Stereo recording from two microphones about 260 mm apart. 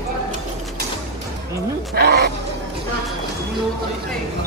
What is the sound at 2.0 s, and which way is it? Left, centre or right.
Speech, right.